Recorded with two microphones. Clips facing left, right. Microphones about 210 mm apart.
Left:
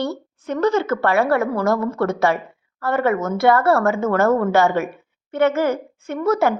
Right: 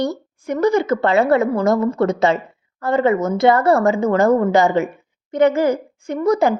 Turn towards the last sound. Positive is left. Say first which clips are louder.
# right 2 dB
turn(degrees=-15)  # may be behind; listen again after turning